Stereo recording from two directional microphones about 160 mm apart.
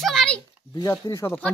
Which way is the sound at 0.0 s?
5° left (ahead or behind).